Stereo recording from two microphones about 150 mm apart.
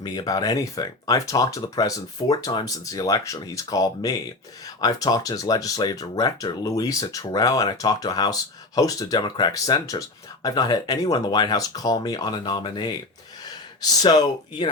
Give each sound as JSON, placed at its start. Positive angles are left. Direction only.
{"t": 0.0, "sound": "speech", "side_deg": 25}
{"t": 14.0, "sound": "speech", "side_deg": 25}